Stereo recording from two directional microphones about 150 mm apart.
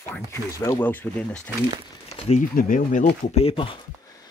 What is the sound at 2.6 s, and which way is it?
Speech, 65° left (ahead or behind).